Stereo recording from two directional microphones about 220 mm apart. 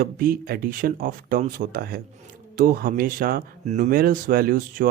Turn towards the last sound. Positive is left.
turn(degrees=-40)  # may be behind; listen again after turning